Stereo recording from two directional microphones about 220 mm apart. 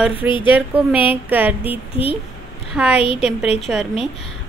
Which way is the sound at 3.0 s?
25° left (ahead or behind).